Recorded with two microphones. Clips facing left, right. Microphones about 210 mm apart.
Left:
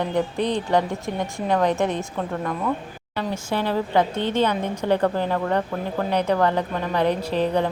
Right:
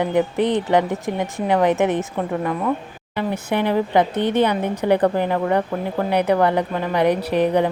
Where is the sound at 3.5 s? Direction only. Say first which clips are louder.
Right 3 dB; 15° right (ahead or behind).